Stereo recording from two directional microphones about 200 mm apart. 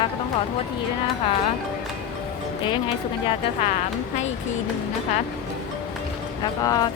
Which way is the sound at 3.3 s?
35° left (ahead or behind).